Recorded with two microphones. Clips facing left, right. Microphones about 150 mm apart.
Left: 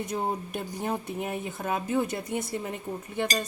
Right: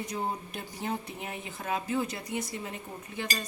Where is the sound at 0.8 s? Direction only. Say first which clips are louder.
Left 3 dB; 50° left (ahead or behind).